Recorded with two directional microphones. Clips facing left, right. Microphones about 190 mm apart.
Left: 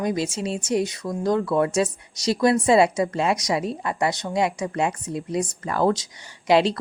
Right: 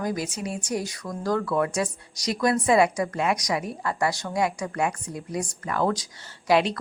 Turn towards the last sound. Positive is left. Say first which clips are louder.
# left 3 dB
turn(degrees=30)  # may be behind; listen again after turning